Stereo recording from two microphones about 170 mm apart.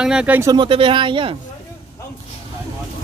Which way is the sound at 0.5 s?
30° right (ahead or behind).